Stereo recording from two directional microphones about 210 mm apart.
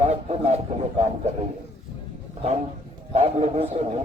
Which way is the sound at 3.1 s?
30° right (ahead or behind).